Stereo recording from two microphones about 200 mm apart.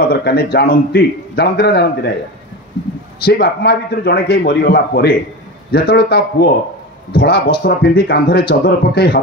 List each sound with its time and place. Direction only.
0.1 s a man's voice: 55° left (ahead or behind)
3.2 s a man's voice: 55° left (ahead or behind)